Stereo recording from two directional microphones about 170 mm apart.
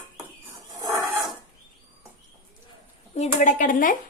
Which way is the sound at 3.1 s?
45° left (ahead or behind).